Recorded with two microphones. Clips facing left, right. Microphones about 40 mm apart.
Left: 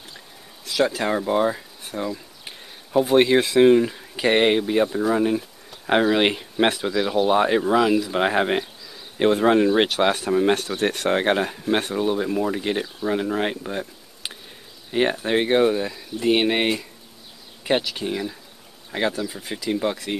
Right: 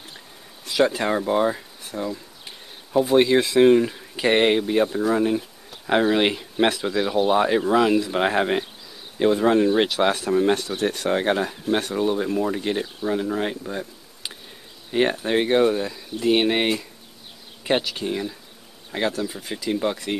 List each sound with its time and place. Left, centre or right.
0.7 s speech: centre
1.0 s speech: centre
9.4 s speech: centre
10.8 s speech: left
11.1 s speech: left
11.9 s speech: centre
13.1 s speech: left
14.9 s speech: centre